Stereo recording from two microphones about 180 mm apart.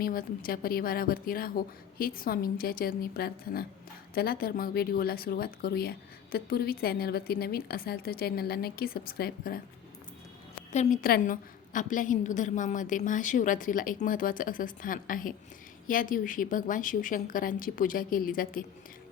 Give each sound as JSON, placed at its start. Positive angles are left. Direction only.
{"t": 0.0, "sound": "a woman's voice", "side_deg": 55}
{"t": 10.7, "sound": "a woman's voice", "side_deg": 40}